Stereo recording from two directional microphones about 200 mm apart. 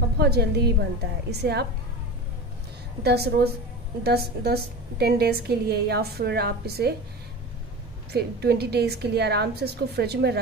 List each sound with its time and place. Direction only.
0.2 s a woman's voice: 55° right (ahead or behind)
3.0 s a woman's voice: 55° right (ahead or behind)
8.1 s a woman's voice: 55° right (ahead or behind)